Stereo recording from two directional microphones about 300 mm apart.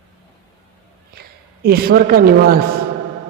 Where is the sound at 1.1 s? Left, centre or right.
Right.